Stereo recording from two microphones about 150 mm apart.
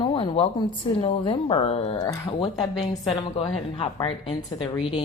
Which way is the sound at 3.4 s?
35° left (ahead or behind).